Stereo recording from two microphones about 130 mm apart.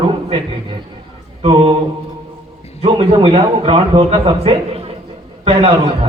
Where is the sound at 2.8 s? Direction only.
50° right (ahead or behind).